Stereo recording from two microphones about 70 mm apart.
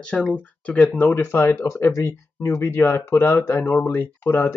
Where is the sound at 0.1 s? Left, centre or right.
Centre.